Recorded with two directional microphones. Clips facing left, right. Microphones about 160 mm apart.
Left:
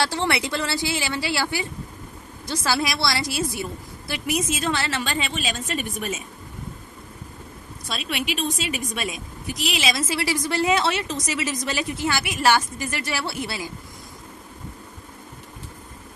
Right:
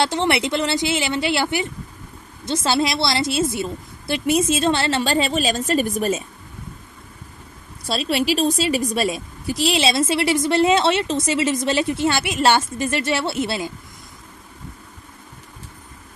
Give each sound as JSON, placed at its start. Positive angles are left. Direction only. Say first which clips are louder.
{"t": 0.0, "sound": "a woman's voice", "louder": "right 4 dB", "side_deg": -20}
{"t": 7.8, "sound": "a woman's voice", "louder": "right 8 dB", "side_deg": -35}